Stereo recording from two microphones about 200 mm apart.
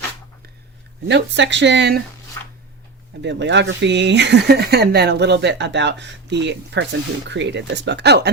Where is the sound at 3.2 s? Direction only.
60° right (ahead or behind).